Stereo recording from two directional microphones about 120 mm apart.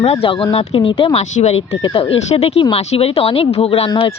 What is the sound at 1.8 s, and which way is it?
Speech, 50° left (ahead or behind).